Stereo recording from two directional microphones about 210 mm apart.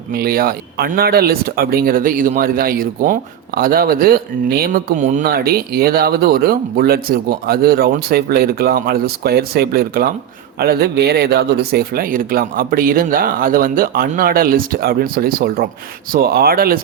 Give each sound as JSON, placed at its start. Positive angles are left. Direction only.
{"t": 0.1, "sound": "speech", "side_deg": -45}